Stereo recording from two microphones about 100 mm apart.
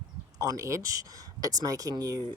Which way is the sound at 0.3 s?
35° right (ahead or behind).